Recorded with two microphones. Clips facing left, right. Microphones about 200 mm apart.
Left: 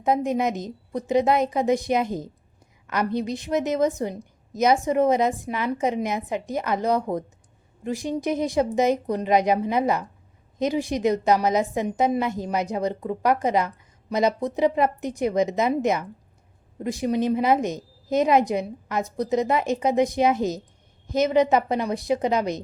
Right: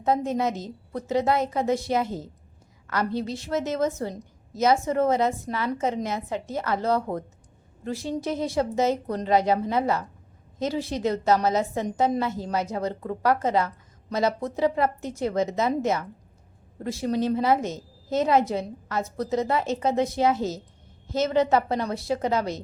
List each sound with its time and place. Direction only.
0.0 s a woman's voice: 15° left (ahead or behind)